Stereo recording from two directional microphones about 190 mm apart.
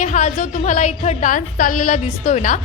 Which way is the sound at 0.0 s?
40° left (ahead or behind).